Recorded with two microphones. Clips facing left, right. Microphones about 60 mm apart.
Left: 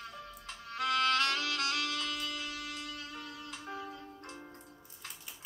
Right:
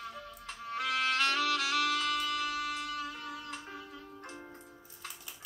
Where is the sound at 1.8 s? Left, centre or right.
Right.